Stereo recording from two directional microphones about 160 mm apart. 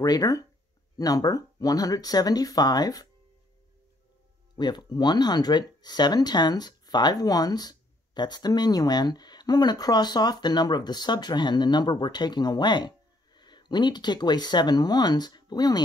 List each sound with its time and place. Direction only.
0.0 s speech: 25° left (ahead or behind)
4.6 s speech: 25° left (ahead or behind)